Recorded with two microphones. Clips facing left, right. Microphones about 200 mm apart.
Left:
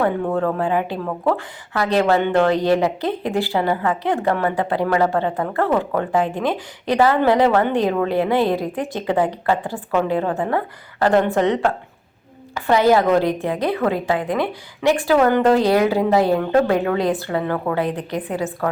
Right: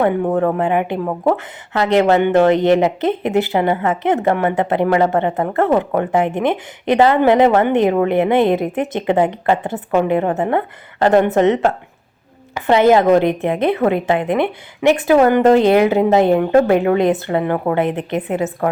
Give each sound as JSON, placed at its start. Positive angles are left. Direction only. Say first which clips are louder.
{"t": 0.0, "sound": "a woman's voice", "louder": "right 4 dB", "side_deg": -20}